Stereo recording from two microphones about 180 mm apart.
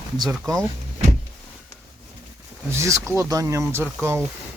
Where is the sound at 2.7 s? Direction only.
15° right (ahead or behind).